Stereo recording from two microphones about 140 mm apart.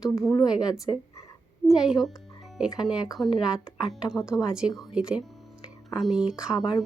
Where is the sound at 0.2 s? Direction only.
20° left (ahead or behind).